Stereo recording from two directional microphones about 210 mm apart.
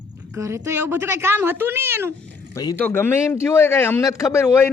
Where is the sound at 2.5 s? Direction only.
15° left (ahead or behind).